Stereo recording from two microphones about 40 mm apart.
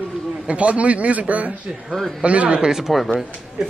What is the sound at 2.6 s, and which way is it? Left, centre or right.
Speech, centre.